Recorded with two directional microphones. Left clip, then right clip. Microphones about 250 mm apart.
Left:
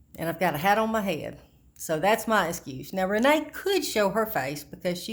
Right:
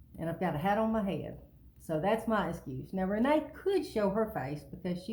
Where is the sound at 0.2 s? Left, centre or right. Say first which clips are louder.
Left 8 dB; left.